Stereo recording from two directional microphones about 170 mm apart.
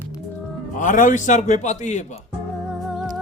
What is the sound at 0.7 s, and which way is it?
A man's voice, 50° left (ahead or behind).